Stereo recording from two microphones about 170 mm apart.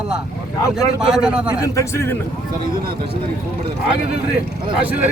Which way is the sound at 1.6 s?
15° left (ahead or behind).